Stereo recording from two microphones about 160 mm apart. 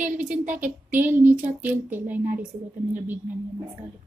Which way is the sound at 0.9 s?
15° right (ahead or behind).